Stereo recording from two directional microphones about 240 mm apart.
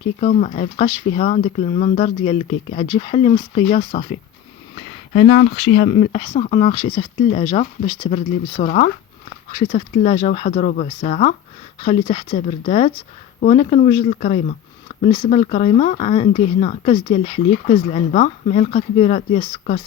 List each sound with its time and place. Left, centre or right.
0.2 s speech: left
5.1 s speech: left
5.9 s speech: left